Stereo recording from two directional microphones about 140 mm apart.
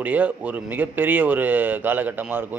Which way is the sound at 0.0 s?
10° right (ahead or behind).